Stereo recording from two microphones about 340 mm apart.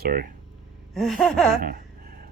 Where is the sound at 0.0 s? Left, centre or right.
Right.